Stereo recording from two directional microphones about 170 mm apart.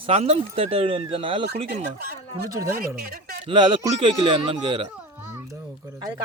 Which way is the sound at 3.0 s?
65° right (ahead or behind).